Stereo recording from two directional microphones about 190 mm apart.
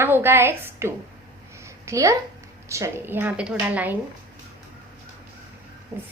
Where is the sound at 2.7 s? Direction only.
15° right (ahead or behind).